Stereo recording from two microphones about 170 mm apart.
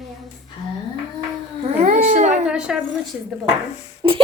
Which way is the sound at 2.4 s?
5° right (ahead or behind).